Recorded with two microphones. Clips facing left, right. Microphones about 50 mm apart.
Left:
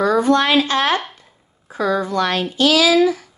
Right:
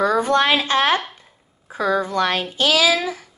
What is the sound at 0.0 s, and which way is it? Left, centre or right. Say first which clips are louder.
A woman's voice: left 2 dB; right.